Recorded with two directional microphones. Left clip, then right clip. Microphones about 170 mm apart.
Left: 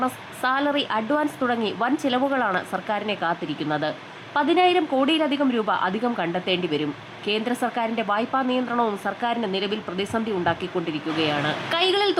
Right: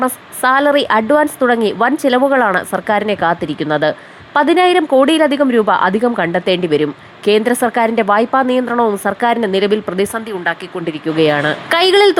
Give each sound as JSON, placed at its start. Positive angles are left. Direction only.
{"t": 0.0, "sound": "a woman's voice", "side_deg": -40}